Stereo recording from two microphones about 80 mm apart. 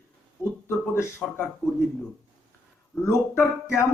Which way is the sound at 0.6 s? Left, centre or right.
Left.